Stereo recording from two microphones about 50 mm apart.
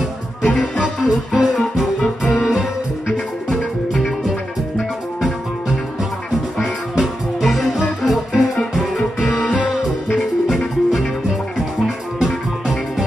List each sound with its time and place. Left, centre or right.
0.5 s music: left
0.8 s music: centre